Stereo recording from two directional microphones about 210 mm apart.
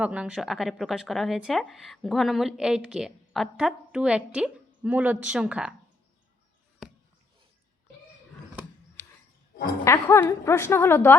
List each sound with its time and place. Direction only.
0.0 s speech: 5° right (ahead or behind)
9.8 s a woman's voice: 15° left (ahead or behind)